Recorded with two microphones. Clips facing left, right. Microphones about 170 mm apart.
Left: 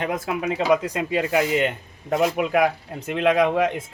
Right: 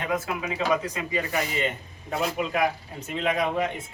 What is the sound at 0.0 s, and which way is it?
A man's voice, 70° left (ahead or behind).